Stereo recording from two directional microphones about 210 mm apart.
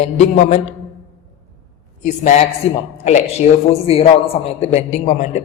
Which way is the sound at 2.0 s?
35° left (ahead or behind).